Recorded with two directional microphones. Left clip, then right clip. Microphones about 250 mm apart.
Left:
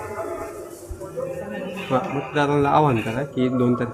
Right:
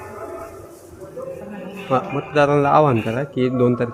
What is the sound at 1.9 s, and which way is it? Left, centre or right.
A man's voice, right.